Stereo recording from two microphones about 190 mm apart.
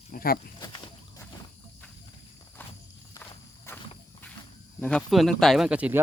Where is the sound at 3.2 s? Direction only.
15° left (ahead or behind).